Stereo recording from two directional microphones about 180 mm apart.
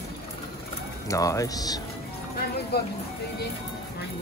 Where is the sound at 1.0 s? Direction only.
20° left (ahead or behind).